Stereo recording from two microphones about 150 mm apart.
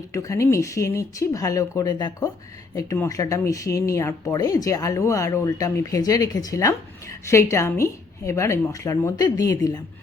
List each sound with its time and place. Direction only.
0.1 s speech: 20° left (ahead or behind)